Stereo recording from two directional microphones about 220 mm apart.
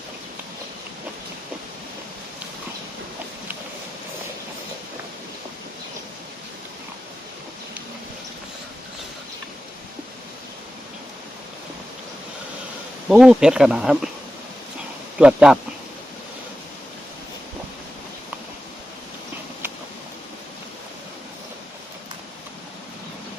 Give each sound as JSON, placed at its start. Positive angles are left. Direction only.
{"t": 13.1, "sound": "speech", "side_deg": -5}
{"t": 15.2, "sound": "speech", "side_deg": -5}